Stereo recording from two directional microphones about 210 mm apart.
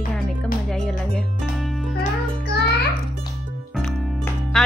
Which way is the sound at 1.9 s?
50° left (ahead or behind).